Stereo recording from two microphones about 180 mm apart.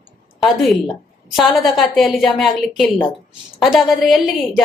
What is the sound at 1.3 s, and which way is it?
Speech, centre (ahead or behind).